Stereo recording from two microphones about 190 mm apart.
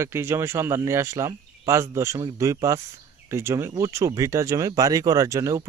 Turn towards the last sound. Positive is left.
turn(degrees=-15)  # may be behind; listen again after turning